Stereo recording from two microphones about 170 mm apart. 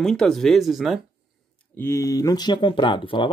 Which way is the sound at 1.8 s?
15° left (ahead or behind).